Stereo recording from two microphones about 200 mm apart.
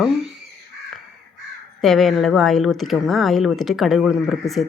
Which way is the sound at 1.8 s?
Centre (ahead or behind).